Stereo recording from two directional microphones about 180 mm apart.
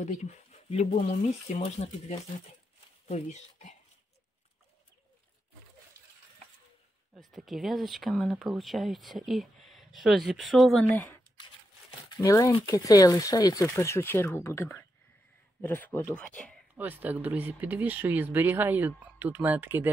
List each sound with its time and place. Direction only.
0.0 s speech: 40° left (ahead or behind)
7.2 s speech: centre (ahead or behind)
12.1 s speech: 20° left (ahead or behind)
16.7 s speech: 10° right (ahead or behind)